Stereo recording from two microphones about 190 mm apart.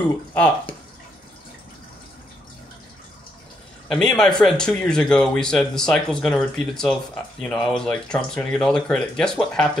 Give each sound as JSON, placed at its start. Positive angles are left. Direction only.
{"t": 0.3, "sound": "speech", "side_deg": 10}
{"t": 3.9, "sound": "speech", "side_deg": 5}